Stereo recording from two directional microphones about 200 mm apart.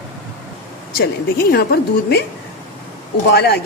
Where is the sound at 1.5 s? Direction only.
50° left (ahead or behind).